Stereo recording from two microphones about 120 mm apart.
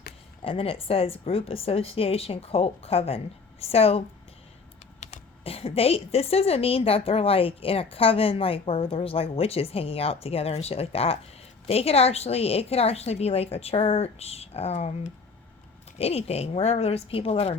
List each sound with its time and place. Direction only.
0.4 s a woman's voice: 50° left (ahead or behind)
16.0 s a woman's voice: 60° left (ahead or behind)